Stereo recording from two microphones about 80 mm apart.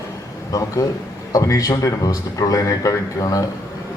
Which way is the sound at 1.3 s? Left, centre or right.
Left.